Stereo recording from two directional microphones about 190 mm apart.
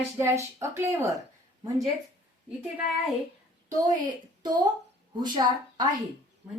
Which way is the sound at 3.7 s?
20° right (ahead or behind).